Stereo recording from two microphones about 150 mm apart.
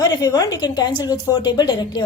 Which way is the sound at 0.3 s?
25° left (ahead or behind).